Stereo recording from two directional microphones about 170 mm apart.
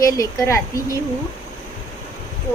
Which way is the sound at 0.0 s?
20° left (ahead or behind).